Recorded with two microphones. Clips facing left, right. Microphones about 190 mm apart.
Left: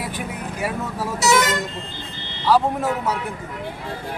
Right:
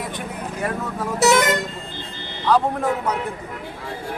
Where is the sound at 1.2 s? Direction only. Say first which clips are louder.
Right 2 dB; 55° right (ahead or behind).